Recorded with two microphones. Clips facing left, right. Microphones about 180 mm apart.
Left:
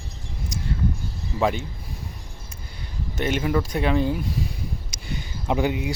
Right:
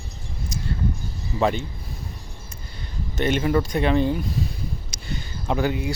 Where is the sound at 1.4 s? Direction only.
10° left (ahead or behind).